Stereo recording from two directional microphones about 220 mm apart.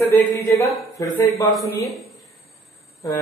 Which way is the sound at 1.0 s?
15° left (ahead or behind).